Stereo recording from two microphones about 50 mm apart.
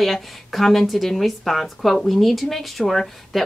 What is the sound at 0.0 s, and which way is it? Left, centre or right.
Speech, centre.